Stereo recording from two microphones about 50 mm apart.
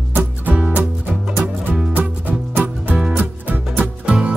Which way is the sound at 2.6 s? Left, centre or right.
Right.